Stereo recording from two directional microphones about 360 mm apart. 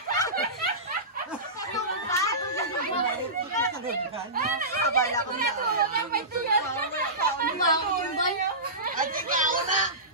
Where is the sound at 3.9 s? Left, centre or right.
Right.